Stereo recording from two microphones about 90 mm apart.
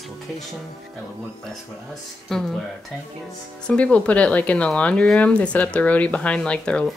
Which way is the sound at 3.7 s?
15° left (ahead or behind).